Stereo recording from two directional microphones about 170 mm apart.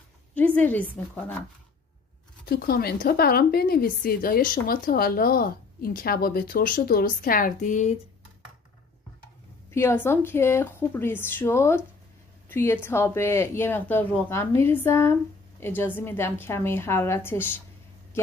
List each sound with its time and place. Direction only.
0.6 s speech: 10° left (ahead or behind)
2.4 s a woman's voice: 65° left (ahead or behind); by 7.9 s 45° left (ahead or behind)
9.7 s speech: 15° left (ahead or behind)